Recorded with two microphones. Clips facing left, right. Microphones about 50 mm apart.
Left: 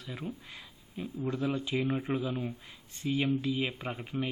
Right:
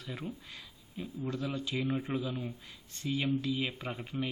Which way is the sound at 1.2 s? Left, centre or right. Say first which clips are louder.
Left 4 dB; centre.